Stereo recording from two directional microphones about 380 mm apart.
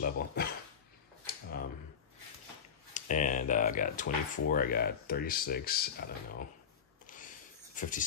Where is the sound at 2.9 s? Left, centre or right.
Centre.